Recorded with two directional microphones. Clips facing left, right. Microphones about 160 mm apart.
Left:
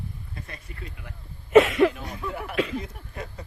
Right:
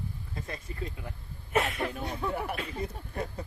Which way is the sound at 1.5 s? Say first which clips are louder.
Left 13 dB; 90° left.